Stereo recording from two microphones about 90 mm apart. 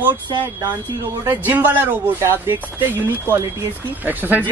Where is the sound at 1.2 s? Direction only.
20° right (ahead or behind).